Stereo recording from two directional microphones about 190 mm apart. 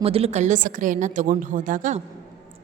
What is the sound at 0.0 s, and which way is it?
A woman's voice, 30° right (ahead or behind).